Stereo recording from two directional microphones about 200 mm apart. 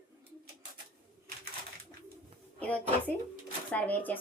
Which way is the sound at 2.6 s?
5° left (ahead or behind).